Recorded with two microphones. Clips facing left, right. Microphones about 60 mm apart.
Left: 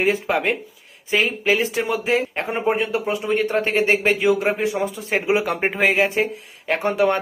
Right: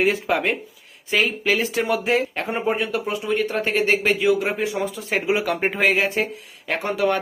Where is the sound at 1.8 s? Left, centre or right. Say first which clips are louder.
Even; centre.